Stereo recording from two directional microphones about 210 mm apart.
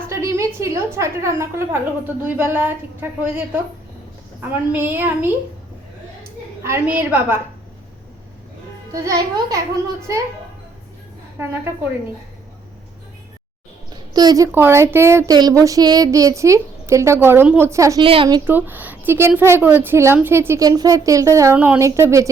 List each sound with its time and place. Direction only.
0.1 s a woman's voice: 15° right (ahead or behind)
6.6 s a woman's voice: 10° right (ahead or behind)
8.9 s a woman's voice: 15° right (ahead or behind)
11.3 s a woman's voice: 10° right (ahead or behind)
13.9 s a woman's voice: 20° right (ahead or behind)
18.4 s a woman's voice: 10° right (ahead or behind)